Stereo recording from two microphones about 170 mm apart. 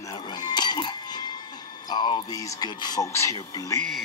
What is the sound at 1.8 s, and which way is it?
Speech, 30° left (ahead or behind).